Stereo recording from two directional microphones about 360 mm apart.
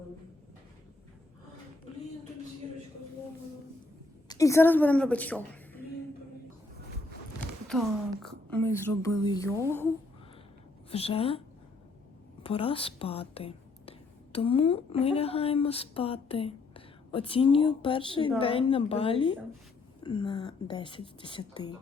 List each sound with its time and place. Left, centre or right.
4.3 s a woman's voice: centre
7.7 s speech: centre
10.8 s a woman's voice: centre